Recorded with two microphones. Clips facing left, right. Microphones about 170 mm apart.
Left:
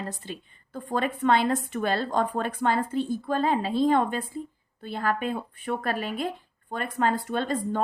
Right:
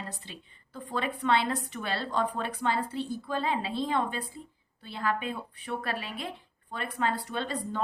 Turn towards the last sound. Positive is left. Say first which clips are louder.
# left 6 dB
turn(degrees=50)  # may be behind; listen again after turning